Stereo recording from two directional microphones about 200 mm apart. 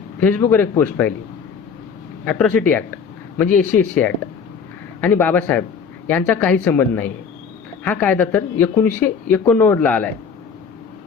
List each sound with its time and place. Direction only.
0.2 s speech: 10° left (ahead or behind)
2.2 s speech: 5° left (ahead or behind)